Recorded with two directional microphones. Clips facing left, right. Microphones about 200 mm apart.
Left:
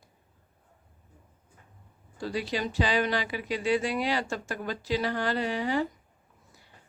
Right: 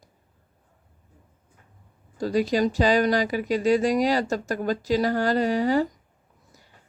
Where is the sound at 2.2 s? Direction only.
40° right (ahead or behind).